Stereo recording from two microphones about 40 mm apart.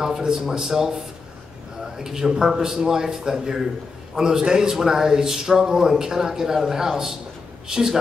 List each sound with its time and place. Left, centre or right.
0.0 s a man's voice: centre
2.0 s a man's voice: centre